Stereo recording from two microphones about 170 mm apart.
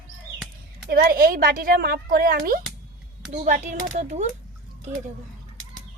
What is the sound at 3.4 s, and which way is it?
Speech, 50° right (ahead or behind).